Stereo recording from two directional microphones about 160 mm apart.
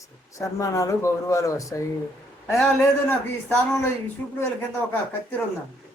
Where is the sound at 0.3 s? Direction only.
20° left (ahead or behind).